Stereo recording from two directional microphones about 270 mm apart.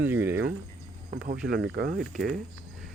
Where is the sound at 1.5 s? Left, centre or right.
Right.